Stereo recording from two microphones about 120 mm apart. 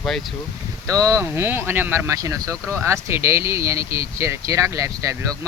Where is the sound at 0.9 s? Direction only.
25° right (ahead or behind).